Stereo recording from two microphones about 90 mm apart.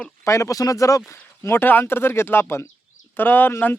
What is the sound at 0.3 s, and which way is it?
Speech, 35° left (ahead or behind).